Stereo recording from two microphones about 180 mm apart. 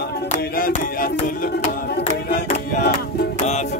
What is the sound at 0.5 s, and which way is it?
Music, 55° left (ahead or behind).